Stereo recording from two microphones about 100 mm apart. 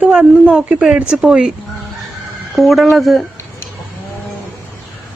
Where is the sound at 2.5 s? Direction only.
Centre (ahead or behind).